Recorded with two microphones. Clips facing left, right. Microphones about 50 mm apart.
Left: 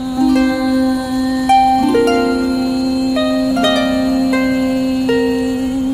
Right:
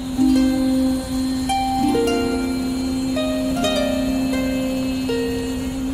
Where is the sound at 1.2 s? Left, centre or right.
Left.